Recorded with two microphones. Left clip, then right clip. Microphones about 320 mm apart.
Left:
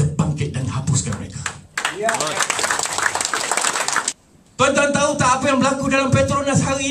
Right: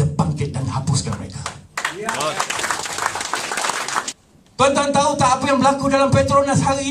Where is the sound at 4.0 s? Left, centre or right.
Centre.